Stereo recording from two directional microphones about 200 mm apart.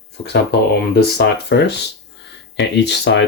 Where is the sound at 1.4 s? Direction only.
55° left (ahead or behind).